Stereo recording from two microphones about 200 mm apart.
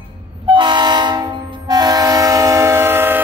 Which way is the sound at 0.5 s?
20° right (ahead or behind).